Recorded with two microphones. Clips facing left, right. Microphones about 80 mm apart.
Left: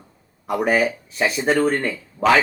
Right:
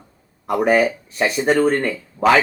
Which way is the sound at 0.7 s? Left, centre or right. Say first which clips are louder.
Right 3 dB; centre.